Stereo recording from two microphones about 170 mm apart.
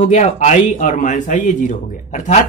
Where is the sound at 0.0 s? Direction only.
45° left (ahead or behind).